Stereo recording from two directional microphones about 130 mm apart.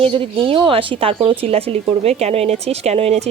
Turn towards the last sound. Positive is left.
turn(degrees=-55)  # may be behind; listen again after turning